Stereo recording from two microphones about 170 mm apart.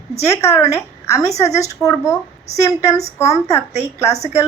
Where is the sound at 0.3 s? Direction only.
15° left (ahead or behind).